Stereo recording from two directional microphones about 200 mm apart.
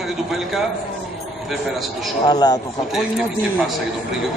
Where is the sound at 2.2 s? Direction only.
20° left (ahead or behind).